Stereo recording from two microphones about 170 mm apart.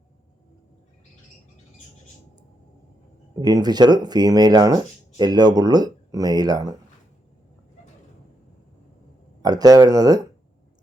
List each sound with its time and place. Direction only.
3.4 s speech: 25° right (ahead or behind)
9.4 s speech: 20° right (ahead or behind)